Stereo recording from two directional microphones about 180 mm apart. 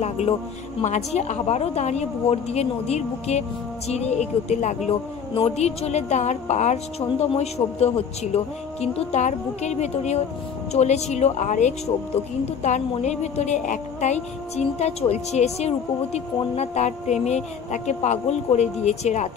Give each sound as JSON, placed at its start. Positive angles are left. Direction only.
{"t": 0.2, "sound": "a woman's voice", "side_deg": 35}